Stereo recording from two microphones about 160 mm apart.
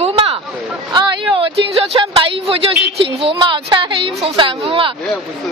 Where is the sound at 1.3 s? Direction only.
35° right (ahead or behind).